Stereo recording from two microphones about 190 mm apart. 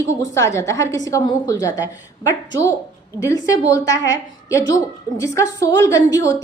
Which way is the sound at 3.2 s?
15° left (ahead or behind).